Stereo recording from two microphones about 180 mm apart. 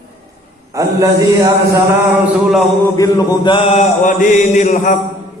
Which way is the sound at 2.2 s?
Centre (ahead or behind).